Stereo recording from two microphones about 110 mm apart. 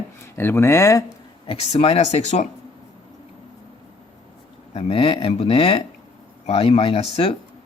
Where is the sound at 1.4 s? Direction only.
60° left (ahead or behind); by 2.4 s 85° left.